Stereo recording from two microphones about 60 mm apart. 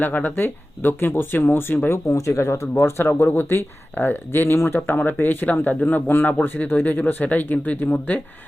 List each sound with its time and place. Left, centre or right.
0.0 s speech: left
2.0 s speech: left